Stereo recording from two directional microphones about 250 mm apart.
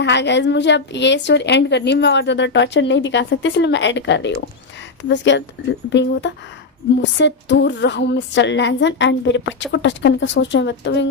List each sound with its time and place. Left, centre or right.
0.0 s a woman's voice: left